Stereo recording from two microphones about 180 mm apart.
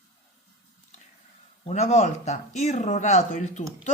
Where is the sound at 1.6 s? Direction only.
35° left (ahead or behind).